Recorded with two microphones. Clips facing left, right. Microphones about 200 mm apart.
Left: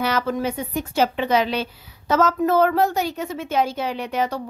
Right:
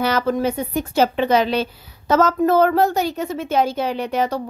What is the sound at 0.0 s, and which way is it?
A woman's voice, 35° right (ahead or behind).